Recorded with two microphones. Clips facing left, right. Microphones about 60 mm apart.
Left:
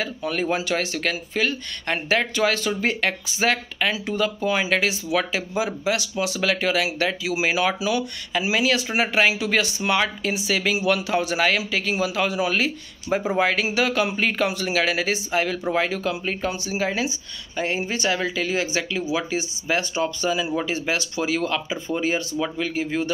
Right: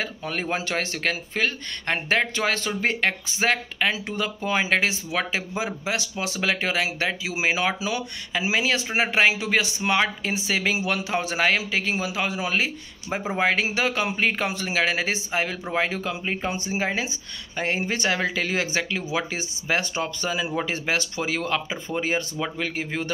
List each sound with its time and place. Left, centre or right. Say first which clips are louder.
0.0 s speech: left 4 dB; right
9.5 s speech: left 1 dB; centre; by 23.1 s right